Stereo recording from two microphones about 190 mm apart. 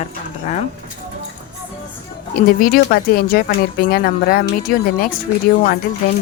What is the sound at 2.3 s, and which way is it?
Speech, 45° left (ahead or behind).